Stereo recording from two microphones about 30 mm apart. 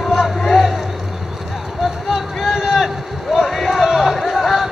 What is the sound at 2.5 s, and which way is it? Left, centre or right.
Run, centre.